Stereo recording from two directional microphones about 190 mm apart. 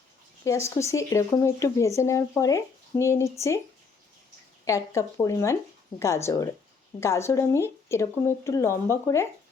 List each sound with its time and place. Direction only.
0.4 s speech: 15° left (ahead or behind)
4.6 s speech: 15° left (ahead or behind)